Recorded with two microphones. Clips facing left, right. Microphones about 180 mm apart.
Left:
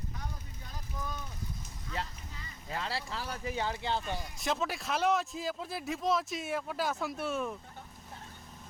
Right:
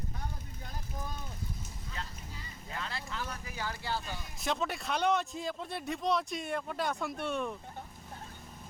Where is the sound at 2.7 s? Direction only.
30° left (ahead or behind).